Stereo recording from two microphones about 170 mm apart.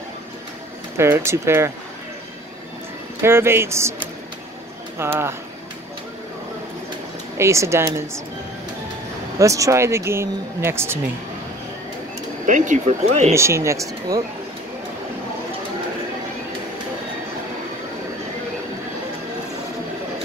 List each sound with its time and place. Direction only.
0.9 s speech: 15° right (ahead or behind)
3.2 s speech: 15° right (ahead or behind)
4.9 s speech: 15° right (ahead or behind)
7.3 s speech: 15° right (ahead or behind)
9.4 s speech: 20° right (ahead or behind)
12.4 s speech: 50° right (ahead or behind)
13.3 s speech: 15° right (ahead or behind)